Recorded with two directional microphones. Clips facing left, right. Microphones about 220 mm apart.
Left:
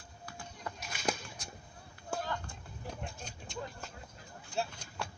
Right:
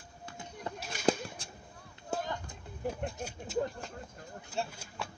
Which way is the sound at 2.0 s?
20° right (ahead or behind).